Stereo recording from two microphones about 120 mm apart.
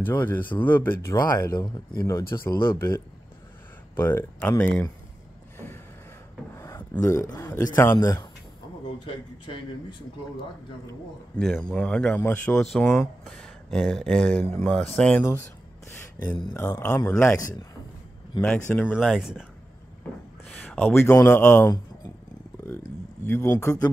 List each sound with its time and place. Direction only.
0.0 s speech: 15° left (ahead or behind)
1.1 s speech: 30° left (ahead or behind); by 4.8 s 10° left (ahead or behind)
6.5 s filing: 20° left (ahead or behind)
7.0 s speech: 25° left (ahead or behind)
9.0 s speech: 45° left (ahead or behind)
11.3 s speech: 5° left (ahead or behind)
12.5 s speech: 5° left (ahead or behind)
16.5 s speech: 20° left (ahead or behind)
18.4 s speech: 10° left (ahead or behind)
18.9 s speech: centre (ahead or behind)
20.4 s speech: 15° left (ahead or behind)
22.7 s a sound: 20° left (ahead or behind)